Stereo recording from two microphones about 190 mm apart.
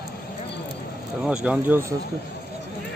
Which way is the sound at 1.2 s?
5° right (ahead or behind).